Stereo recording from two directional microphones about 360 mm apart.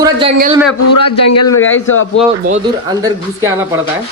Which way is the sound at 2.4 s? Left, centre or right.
Centre.